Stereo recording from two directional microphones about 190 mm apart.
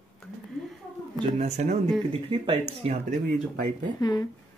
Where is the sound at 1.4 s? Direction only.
35° right (ahead or behind).